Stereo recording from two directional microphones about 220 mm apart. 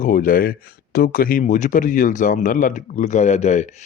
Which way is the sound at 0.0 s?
40° left (ahead or behind).